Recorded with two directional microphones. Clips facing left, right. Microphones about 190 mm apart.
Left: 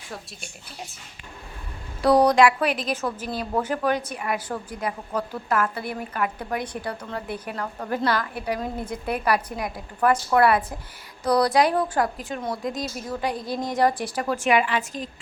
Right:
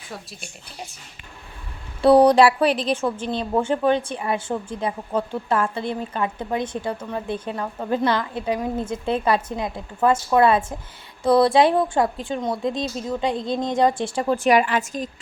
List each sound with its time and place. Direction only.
2.0 s a woman's voice: 30° right (ahead or behind); by 15.1 s 45° right (ahead or behind)